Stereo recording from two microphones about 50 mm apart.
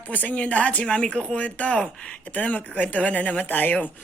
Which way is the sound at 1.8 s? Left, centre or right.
Centre.